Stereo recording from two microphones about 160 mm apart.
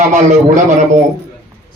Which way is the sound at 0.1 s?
50° right (ahead or behind).